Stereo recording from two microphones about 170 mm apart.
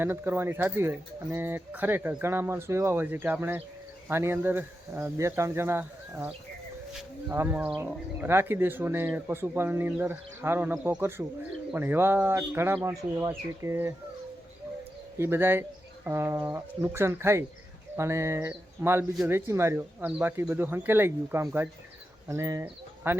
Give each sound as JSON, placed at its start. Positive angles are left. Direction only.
{"t": 0.0, "sound": "speech", "side_deg": -15}
{"t": 15.2, "sound": "speech", "side_deg": -15}